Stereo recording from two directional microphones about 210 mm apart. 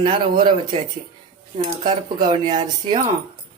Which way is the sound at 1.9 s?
25° right (ahead or behind).